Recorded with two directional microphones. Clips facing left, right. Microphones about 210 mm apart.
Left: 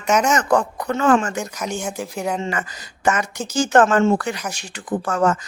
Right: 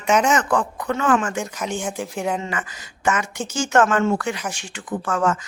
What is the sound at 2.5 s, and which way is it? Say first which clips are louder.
Speech: left 3 dB; 40° left (ahead or behind).